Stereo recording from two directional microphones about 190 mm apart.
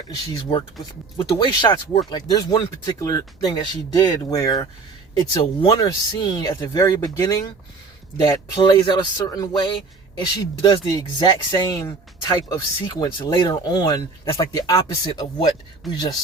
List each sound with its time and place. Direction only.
1.4 s a man's voice: 25° left (ahead or behind)